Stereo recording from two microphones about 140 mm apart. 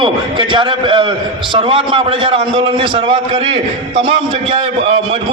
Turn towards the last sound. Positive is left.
turn(degrees=-40)  # may be behind; listen again after turning